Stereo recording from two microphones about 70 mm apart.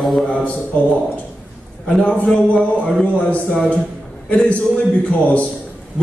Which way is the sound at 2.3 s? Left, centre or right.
Centre.